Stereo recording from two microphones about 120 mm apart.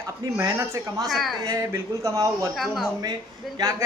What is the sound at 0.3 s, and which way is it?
Speech, 25° right (ahead or behind).